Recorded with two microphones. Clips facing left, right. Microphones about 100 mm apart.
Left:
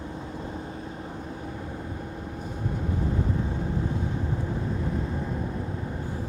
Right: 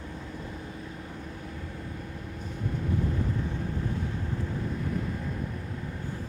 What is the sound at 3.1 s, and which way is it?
Vehicle, 20° left (ahead or behind).